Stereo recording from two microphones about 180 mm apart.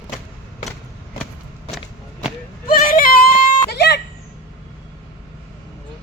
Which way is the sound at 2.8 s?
55° left (ahead or behind).